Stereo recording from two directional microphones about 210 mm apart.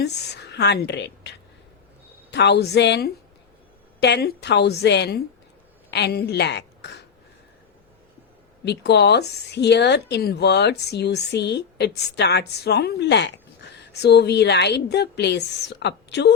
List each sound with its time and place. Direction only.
0.0 s a woman's voice: 50° left (ahead or behind)
8.6 s speech: 55° left (ahead or behind)